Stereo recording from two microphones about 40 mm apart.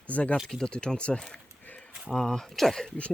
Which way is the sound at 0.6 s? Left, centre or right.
Left.